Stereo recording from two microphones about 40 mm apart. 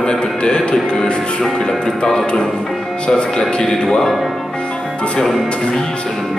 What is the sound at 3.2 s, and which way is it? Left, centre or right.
Speech, left.